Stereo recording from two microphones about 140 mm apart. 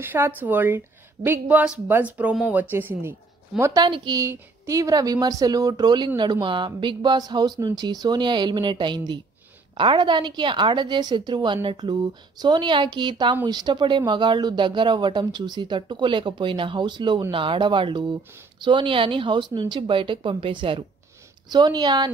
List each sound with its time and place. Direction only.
0.0 s a woman's voice: 15° right (ahead or behind)
3.8 s speech: 35° right (ahead or behind)